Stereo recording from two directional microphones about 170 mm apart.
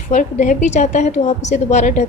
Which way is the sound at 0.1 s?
50° left (ahead or behind).